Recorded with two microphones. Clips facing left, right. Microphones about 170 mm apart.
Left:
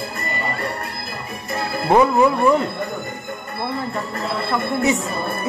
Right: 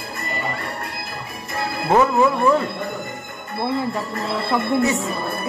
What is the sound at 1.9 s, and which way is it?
Speech, 15° left (ahead or behind).